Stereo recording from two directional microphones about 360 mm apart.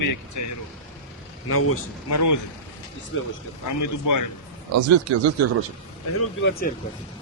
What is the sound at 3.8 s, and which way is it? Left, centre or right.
Speech, left.